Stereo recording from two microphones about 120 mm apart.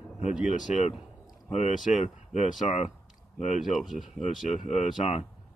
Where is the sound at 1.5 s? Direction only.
75° left (ahead or behind).